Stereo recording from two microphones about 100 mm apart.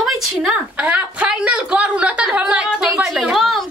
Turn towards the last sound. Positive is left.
turn(degrees=0)  # may be behind; listen again after turning